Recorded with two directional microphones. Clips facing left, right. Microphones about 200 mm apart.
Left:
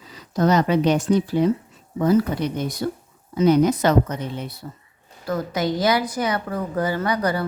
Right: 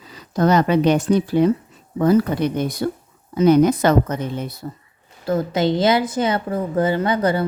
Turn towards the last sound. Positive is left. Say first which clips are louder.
# right 4 dB
turn(degrees=-25)  # may be behind; listen again after turning